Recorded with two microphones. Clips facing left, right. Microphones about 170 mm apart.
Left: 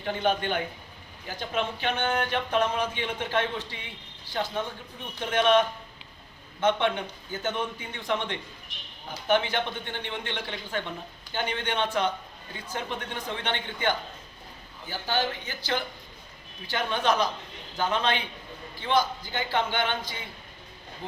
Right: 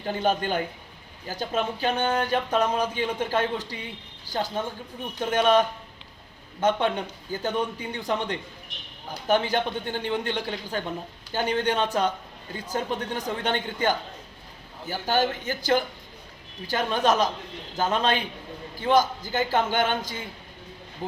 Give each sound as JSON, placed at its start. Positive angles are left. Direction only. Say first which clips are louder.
{"t": 0.2, "sound": "a man's voice", "louder": "right 2 dB", "side_deg": -40}